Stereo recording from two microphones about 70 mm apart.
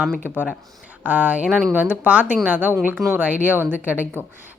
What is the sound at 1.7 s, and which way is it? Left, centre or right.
A woman's voice, right.